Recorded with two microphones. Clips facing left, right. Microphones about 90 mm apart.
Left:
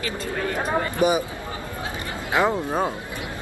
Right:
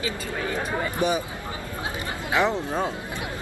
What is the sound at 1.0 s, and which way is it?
Speech, 15° left (ahead or behind).